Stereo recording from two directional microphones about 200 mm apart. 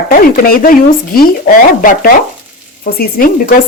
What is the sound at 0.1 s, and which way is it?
Speech, 45° left (ahead or behind).